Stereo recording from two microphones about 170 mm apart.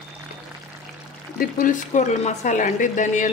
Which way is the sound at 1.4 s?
50° left (ahead or behind).